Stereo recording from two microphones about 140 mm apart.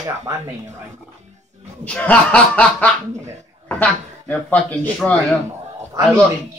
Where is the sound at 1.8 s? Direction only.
10° left (ahead or behind).